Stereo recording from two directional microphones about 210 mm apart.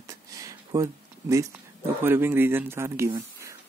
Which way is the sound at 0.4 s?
15° right (ahead or behind).